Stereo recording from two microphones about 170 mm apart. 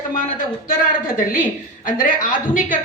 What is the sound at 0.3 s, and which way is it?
A woman's voice, 55° left (ahead or behind).